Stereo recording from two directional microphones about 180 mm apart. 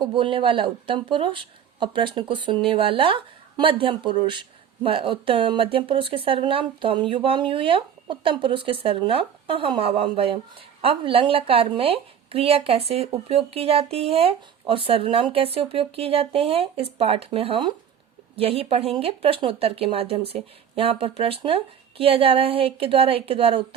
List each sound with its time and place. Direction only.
0.0 s speech: 30° right (ahead or behind)